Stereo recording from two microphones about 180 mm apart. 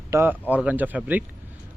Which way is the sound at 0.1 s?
15° right (ahead or behind).